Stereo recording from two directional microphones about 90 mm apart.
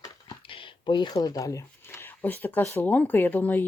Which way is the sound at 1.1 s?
40° left (ahead or behind).